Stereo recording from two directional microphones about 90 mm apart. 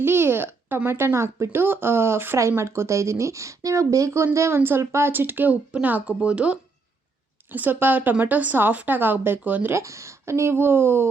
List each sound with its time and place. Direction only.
0.0 s speech: 25° right (ahead or behind)
9.7 s speech: 35° right (ahead or behind)